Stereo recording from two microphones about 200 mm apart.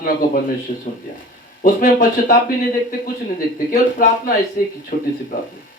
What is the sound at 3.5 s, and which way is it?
Speech, 45° left (ahead or behind).